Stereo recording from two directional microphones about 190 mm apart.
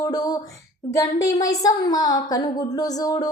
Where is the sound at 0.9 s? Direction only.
15° left (ahead or behind).